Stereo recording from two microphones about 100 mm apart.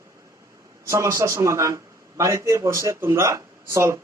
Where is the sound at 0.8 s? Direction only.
30° right (ahead or behind).